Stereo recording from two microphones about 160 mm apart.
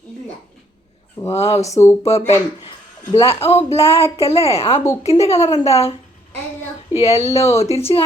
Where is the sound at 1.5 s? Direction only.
20° left (ahead or behind).